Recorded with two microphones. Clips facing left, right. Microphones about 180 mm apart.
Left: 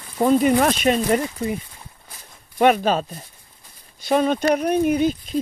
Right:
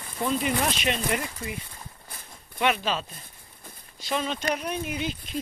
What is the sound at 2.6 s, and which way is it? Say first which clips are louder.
Speech: left 9 dB; 45° left (ahead or behind).